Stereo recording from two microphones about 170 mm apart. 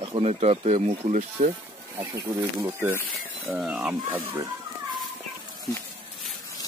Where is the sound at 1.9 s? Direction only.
15° right (ahead or behind).